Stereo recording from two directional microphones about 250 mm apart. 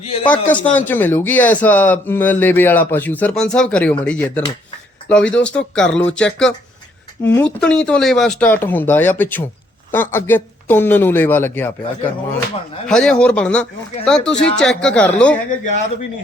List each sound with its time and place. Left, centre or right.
0.0 s a man's voice: left
0.6 s speech: centre
12.9 s speech: centre